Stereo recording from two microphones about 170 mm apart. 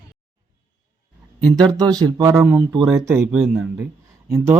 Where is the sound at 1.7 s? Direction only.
20° right (ahead or behind).